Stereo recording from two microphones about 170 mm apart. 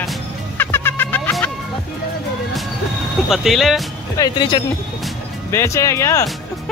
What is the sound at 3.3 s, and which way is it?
Speech, centre (ahead or behind).